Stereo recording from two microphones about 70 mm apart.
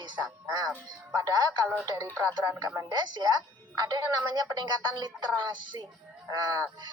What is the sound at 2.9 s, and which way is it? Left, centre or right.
Speech, right.